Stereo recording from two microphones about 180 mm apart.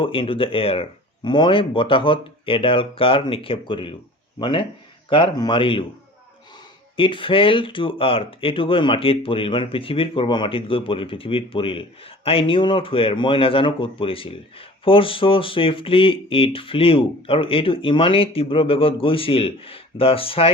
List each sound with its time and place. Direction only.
0.0 s speech: 30° left (ahead or behind)
6.9 s speech: 30° left (ahead or behind)